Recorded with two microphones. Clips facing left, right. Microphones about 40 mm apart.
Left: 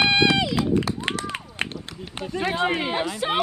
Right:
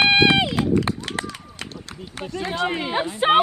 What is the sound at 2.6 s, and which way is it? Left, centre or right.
Speech, centre.